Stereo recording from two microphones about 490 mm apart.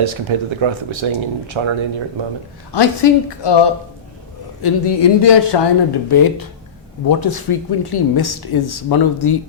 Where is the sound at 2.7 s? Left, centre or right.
Left.